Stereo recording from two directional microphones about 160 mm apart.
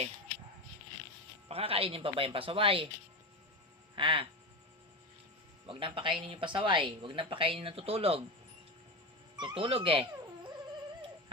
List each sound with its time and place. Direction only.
1.5 s speech: 40° right (ahead or behind)
3.9 s speech: 30° right (ahead or behind)
5.6 s speech: 30° right (ahead or behind)
9.3 s speech: 30° right (ahead or behind)